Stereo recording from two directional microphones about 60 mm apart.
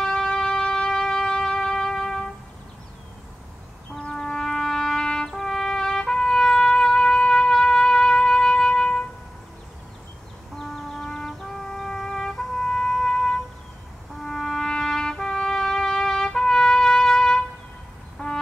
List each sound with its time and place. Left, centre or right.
0.0 s shofar: centre
4.1 s trumpet: centre
10.5 s music: centre
14.2 s trumpet: centre
18.2 s music: centre